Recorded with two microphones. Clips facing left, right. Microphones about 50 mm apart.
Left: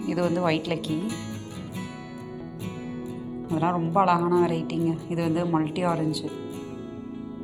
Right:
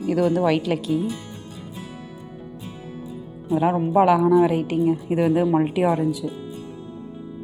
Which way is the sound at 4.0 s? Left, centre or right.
Centre.